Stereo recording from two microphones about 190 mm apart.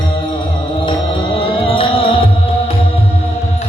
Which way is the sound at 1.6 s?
30° left (ahead or behind).